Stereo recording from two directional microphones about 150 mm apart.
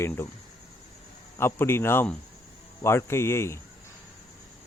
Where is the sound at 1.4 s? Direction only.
15° left (ahead or behind).